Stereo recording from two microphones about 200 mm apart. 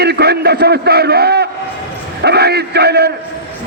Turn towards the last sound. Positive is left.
turn(degrees=-55)  # may be behind; listen again after turning